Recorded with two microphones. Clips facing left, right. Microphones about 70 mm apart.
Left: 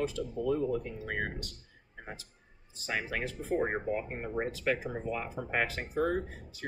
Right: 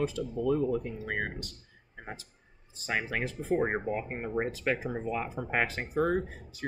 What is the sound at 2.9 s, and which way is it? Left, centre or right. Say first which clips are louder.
Speech: right 2 dB; right.